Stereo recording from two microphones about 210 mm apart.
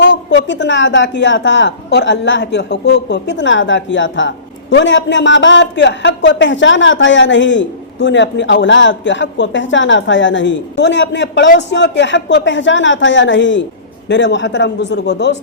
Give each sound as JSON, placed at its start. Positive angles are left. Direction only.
{"t": 0.0, "sound": "a woman's voice", "side_deg": 60}